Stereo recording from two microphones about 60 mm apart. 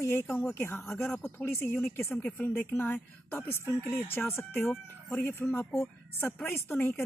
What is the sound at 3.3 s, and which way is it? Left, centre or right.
A woman's voice, left.